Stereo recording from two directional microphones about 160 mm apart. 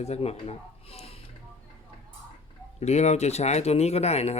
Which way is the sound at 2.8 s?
45° left (ahead or behind).